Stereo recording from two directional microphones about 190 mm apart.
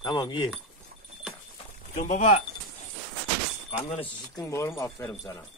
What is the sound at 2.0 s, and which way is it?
Speech, 40° left (ahead or behind).